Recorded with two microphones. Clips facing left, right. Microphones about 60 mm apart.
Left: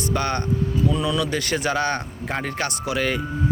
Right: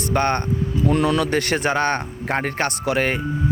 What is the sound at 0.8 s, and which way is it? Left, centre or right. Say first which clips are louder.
Speech: right 6 dB; right.